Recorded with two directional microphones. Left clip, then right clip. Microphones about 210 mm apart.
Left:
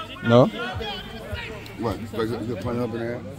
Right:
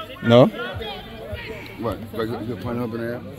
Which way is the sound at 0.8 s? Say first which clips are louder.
Even; 65° left (ahead or behind).